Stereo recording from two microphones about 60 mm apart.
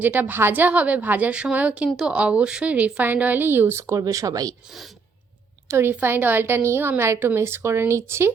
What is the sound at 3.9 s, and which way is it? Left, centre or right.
Speech, right.